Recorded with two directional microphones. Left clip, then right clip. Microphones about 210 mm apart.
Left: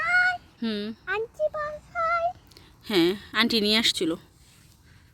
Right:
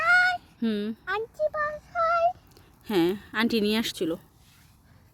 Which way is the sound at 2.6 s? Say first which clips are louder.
Left 2 dB; 5° right (ahead or behind).